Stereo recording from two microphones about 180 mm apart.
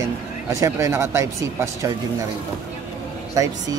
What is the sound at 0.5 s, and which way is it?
Speech, 15° right (ahead or behind).